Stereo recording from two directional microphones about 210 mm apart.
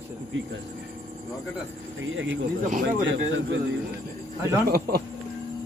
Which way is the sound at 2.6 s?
40° right (ahead or behind).